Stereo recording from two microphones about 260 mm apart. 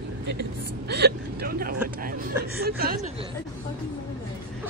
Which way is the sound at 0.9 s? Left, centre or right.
Right.